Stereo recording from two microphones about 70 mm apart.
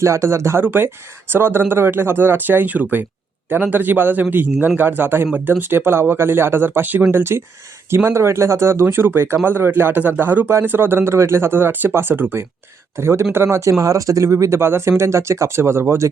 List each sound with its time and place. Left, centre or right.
0.0 s a man's voice: right
14.6 s speech: right